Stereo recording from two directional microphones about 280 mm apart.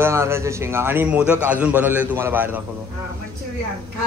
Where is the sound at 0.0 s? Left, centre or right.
Centre.